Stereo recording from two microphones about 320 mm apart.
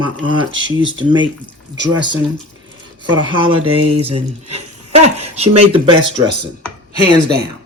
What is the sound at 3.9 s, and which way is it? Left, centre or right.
Speech, centre.